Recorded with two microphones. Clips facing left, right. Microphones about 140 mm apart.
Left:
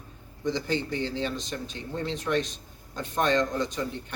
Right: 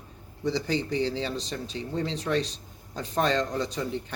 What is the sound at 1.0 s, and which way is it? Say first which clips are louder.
Speech: right 1 dB; 35° right (ahead or behind).